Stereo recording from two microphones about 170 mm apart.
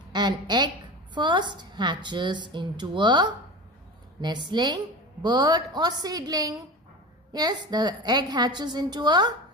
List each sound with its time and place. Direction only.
0.1 s a woman's voice: 25° right (ahead or behind)